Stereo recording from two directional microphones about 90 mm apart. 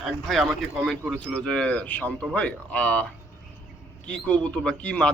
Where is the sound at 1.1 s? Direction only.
10° left (ahead or behind).